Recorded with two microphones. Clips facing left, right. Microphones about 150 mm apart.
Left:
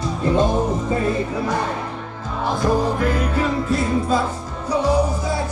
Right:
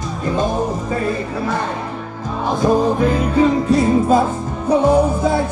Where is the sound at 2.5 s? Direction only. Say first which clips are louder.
Right 4 dB; 20° right (ahead or behind).